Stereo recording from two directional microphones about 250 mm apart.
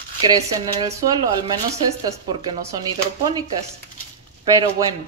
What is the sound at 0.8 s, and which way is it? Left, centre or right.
Speech, centre.